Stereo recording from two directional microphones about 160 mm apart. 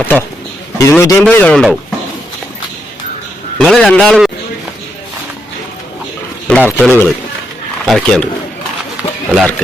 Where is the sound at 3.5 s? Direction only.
Centre (ahead or behind).